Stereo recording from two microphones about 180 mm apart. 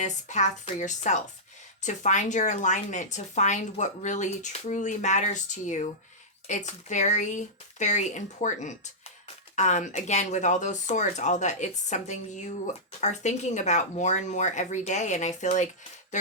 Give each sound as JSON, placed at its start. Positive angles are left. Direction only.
{"t": 0.0, "sound": "speech", "side_deg": 40}